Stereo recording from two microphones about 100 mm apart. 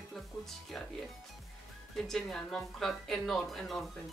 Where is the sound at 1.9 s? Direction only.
5° left (ahead or behind).